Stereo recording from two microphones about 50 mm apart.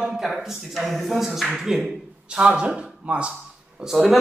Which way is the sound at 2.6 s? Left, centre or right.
Centre.